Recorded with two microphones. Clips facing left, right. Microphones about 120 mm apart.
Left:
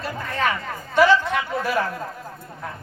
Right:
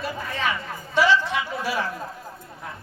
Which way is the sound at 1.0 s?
50° left (ahead or behind).